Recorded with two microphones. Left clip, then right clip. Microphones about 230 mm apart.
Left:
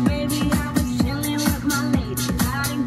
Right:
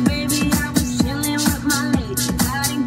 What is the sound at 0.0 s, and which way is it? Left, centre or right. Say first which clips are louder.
Music: right 3 dB; right.